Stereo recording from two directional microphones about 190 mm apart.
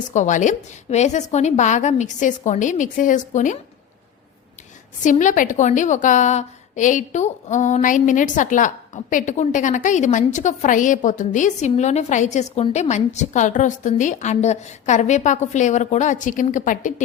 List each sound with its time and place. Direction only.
0.1 s a woman's voice: 40° left (ahead or behind)
5.0 s a woman's voice: 40° left (ahead or behind)